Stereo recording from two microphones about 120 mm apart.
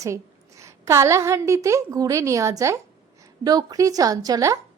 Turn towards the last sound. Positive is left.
turn(degrees=-30)  # may be behind; listen again after turning